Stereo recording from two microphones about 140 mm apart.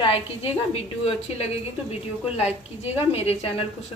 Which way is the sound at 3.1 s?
45° left (ahead or behind).